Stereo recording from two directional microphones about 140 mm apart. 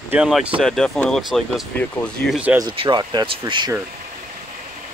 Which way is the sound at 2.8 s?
30° right (ahead or behind).